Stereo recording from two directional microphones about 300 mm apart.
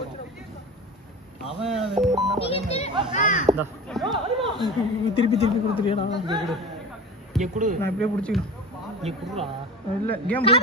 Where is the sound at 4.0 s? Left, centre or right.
Centre.